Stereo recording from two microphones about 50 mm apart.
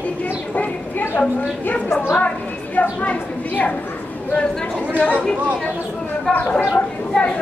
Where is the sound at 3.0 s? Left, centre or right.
Left.